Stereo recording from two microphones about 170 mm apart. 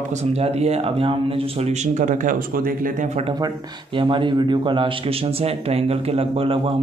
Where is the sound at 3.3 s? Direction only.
25° right (ahead or behind).